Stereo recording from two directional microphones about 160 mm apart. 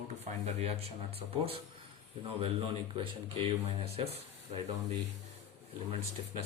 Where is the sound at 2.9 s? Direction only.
30° right (ahead or behind).